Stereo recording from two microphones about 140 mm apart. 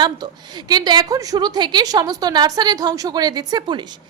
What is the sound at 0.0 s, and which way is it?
A woman's voice, 30° right (ahead or behind).